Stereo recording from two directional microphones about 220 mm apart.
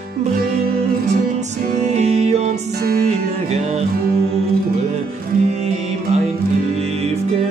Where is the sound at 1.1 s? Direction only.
30° right (ahead or behind).